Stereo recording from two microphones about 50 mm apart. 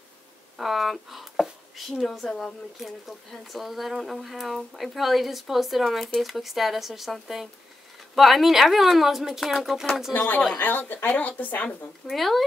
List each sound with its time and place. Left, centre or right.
0.6 s a woman's voice: centre
10.1 s speech: left
12.1 s a woman's voice: centre